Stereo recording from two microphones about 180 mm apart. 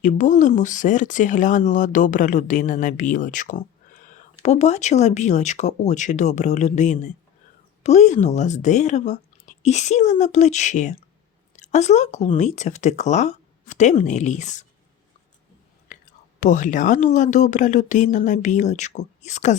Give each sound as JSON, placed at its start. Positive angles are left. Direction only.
{"t": 0.0, "sound": "speech", "side_deg": 45}
{"t": 15.9, "sound": "whispering", "side_deg": 45}
{"t": 16.4, "sound": "speech", "side_deg": 45}